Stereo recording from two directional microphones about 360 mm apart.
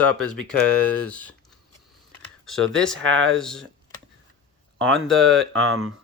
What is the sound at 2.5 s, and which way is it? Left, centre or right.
Speech, centre.